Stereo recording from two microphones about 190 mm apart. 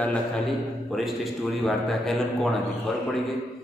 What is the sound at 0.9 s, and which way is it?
A man's voice, centre (ahead or behind).